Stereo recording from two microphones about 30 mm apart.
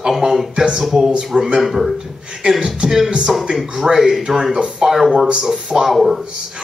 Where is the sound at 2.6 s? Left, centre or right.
Right.